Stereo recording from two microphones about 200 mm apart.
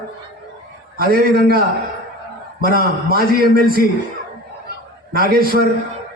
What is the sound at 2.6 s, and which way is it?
A man's voice, 45° right (ahead or behind).